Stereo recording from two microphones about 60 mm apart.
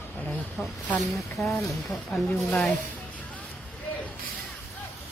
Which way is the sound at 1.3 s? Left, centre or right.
Centre.